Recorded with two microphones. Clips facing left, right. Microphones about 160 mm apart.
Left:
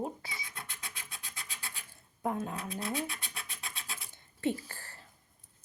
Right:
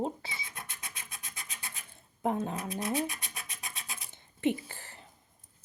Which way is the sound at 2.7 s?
20° right (ahead or behind).